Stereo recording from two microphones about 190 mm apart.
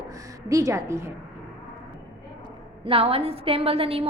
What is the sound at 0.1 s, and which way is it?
A woman's voice, 15° right (ahead or behind).